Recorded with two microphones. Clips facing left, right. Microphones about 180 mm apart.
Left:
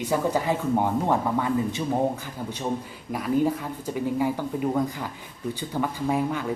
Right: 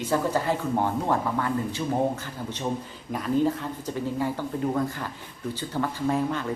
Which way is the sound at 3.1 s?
10° left (ahead or behind).